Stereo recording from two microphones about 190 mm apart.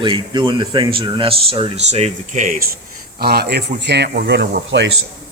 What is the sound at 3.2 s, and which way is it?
Speech, 55° right (ahead or behind).